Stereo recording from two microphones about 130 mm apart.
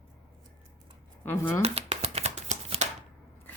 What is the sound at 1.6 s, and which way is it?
Shuffling cards, 55° right (ahead or behind).